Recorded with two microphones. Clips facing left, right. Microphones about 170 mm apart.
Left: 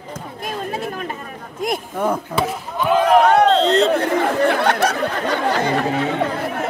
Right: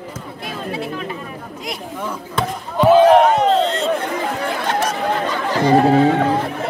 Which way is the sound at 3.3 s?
70° left (ahead or behind).